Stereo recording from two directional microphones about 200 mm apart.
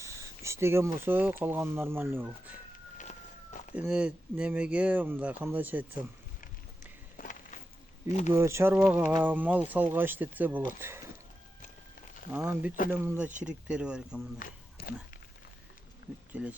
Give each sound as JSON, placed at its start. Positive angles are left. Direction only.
{"t": 0.0, "sound": "speech", "side_deg": -15}
{"t": 3.8, "sound": "speech", "side_deg": -5}
{"t": 8.3, "sound": "speech", "side_deg": -15}
{"t": 12.4, "sound": "speech", "side_deg": -10}
{"t": 14.3, "sound": "a sound", "side_deg": 45}
{"t": 16.3, "sound": "speech", "side_deg": -5}